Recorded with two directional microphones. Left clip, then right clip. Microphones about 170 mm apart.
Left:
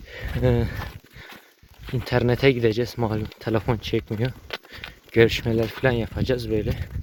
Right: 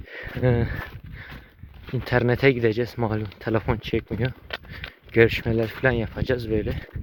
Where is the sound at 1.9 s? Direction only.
5° left (ahead or behind).